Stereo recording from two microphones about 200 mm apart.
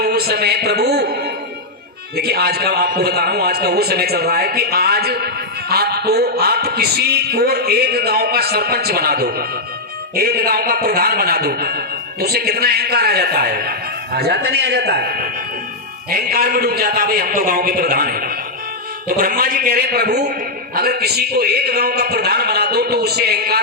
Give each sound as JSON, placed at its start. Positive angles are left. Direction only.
{"t": 0.0, "sound": "a man's voice", "side_deg": -50}